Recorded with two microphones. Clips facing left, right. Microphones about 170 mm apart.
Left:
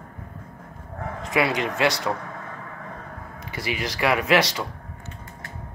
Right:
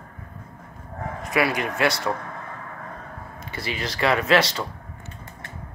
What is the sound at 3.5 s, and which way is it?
Speech, 15° left (ahead or behind).